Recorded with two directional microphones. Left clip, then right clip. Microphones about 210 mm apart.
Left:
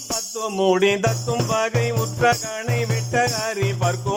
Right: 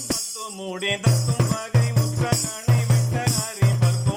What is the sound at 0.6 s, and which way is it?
Music, 40° left (ahead or behind).